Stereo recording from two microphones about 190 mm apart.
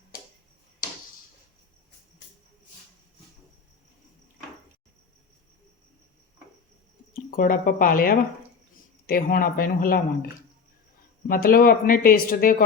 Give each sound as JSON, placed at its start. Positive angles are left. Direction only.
{"t": 7.3, "sound": "speech", "side_deg": 45}
{"t": 11.3, "sound": "speech", "side_deg": 50}